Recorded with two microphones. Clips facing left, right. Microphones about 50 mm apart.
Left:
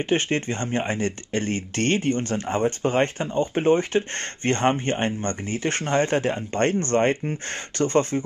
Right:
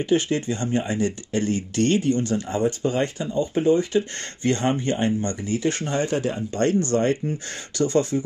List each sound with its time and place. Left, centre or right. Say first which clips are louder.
0.0 s speech: right 1 dB; left